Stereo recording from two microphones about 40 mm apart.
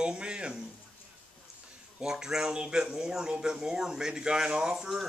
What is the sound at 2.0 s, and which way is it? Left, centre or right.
Speech, centre.